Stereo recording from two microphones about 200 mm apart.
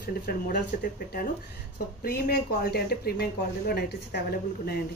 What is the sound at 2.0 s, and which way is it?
A woman's voice, 50° left (ahead or behind).